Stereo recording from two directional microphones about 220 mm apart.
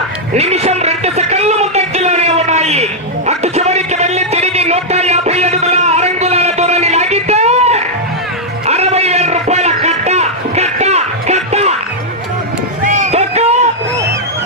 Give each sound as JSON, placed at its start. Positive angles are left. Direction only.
{"t": 0.3, "sound": "a sound", "side_deg": -30}
{"t": 8.6, "sound": "music", "side_deg": -30}
{"t": 12.8, "sound": "music", "side_deg": -35}